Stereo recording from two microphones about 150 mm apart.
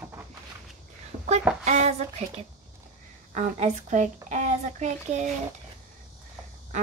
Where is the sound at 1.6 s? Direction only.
50° right (ahead or behind).